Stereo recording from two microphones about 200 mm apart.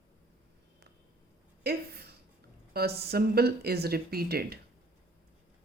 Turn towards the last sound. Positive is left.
turn(degrees=-50)  # may be behind; listen again after turning